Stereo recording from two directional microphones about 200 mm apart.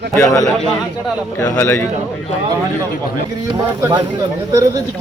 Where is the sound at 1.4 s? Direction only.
15° left (ahead or behind).